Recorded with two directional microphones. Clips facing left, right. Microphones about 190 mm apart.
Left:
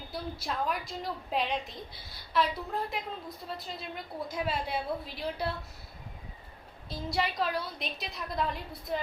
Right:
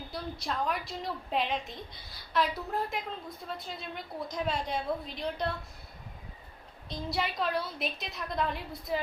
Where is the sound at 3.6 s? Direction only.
Centre (ahead or behind).